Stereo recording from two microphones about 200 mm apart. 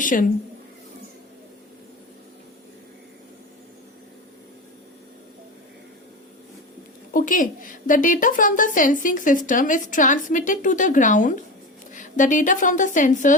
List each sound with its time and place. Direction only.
0.0 s a woman's voice: 40° left (ahead or behind)
7.1 s a woman's voice: 40° left (ahead or behind)